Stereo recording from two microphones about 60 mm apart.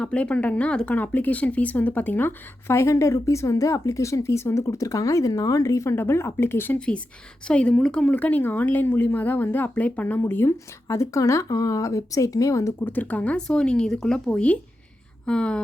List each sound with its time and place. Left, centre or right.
0.0 s speech: centre
0.9 s speech: left
2.6 s speech: left
5.8 s a woman's voice: left
6.7 s speech: centre
8.1 s speech: left
10.8 s speech: left
12.8 s speech: left